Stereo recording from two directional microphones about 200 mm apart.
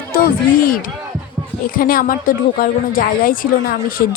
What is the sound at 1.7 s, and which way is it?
A woman's voice, 45° left (ahead or behind).